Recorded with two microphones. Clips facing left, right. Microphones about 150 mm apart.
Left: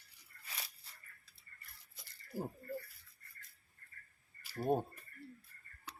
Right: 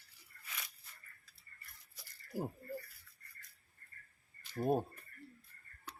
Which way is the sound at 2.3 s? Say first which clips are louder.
Right 2 dB; 10° right (ahead or behind).